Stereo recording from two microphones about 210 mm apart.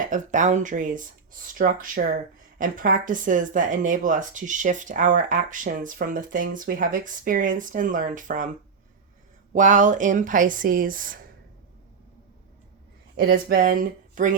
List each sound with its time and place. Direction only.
0.1 s speech: 35° right (ahead or behind)
9.5 s speech: 40° right (ahead or behind)
13.1 s speech: 45° right (ahead or behind)